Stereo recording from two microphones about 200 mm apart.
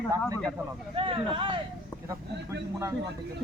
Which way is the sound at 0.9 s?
25° right (ahead or behind).